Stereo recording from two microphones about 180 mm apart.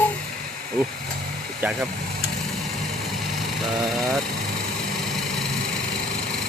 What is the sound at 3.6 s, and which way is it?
Speech, centre (ahead or behind).